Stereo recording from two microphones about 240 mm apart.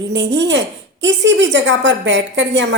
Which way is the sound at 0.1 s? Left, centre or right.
Right.